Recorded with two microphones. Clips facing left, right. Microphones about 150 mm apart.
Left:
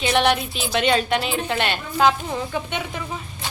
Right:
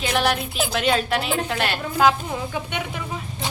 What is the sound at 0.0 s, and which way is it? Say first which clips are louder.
A woman's voice: left 3 dB; centre (ahead or behind).